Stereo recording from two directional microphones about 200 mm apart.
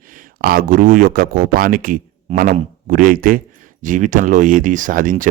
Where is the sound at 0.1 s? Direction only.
45° right (ahead or behind).